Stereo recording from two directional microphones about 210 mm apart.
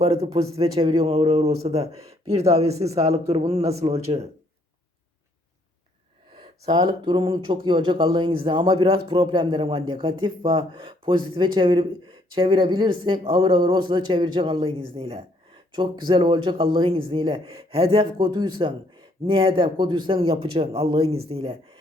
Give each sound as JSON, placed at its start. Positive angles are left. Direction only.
{"t": 0.0, "sound": "speech", "side_deg": -30}
{"t": 6.3, "sound": "a sound", "side_deg": -20}
{"t": 7.0, "sound": "speech", "side_deg": -25}